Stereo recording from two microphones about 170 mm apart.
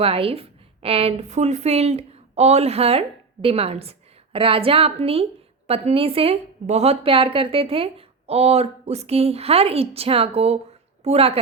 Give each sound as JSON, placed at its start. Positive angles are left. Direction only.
{"t": 0.0, "sound": "a woman's voice", "side_deg": -35}